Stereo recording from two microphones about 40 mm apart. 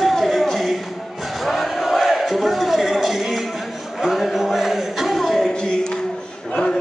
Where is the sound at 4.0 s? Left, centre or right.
Centre.